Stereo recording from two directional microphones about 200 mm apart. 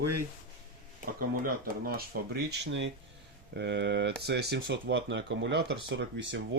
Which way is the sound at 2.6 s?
65° right (ahead or behind).